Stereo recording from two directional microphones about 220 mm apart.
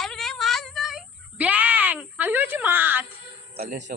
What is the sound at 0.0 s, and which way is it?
Cat, centre (ahead or behind).